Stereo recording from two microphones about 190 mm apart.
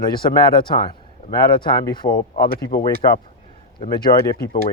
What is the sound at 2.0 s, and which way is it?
Speech, 35° left (ahead or behind).